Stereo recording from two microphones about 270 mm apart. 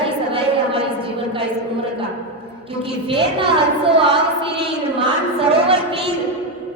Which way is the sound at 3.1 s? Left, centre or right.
Centre.